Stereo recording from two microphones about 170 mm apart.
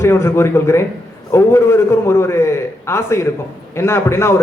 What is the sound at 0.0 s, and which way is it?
A man's voice, 15° left (ahead or behind).